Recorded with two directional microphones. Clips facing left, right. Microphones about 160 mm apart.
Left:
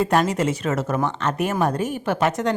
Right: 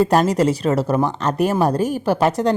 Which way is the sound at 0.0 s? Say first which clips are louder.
Right 4 dB; 35° right (ahead or behind).